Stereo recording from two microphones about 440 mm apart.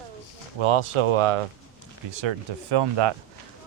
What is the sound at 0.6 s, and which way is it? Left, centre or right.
Speech, right.